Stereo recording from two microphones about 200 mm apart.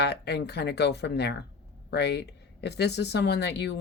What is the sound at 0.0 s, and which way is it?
Speech, 55° left (ahead or behind).